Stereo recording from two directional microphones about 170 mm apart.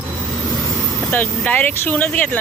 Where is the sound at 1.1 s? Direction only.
10° left (ahead or behind).